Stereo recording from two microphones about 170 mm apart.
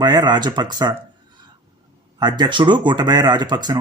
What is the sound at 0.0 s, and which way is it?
Speech, 25° right (ahead or behind).